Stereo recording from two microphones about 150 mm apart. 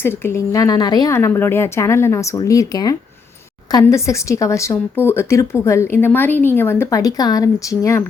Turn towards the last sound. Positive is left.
turn(degrees=20)  # may be behind; listen again after turning